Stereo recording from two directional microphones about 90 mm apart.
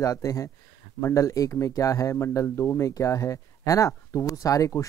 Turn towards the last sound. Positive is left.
turn(degrees=40)  # may be behind; listen again after turning